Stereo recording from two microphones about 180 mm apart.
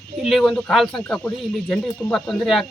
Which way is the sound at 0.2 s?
Centre (ahead or behind).